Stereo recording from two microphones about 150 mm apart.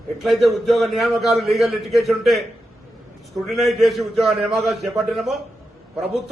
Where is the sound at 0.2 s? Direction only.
Centre (ahead or behind).